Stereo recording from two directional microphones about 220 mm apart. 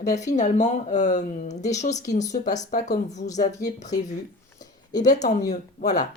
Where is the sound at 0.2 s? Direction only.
30° left (ahead or behind).